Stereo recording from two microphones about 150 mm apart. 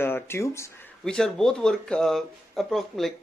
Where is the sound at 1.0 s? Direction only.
5° left (ahead or behind).